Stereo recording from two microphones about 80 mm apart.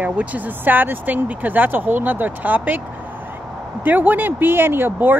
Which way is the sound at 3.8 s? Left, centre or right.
Right.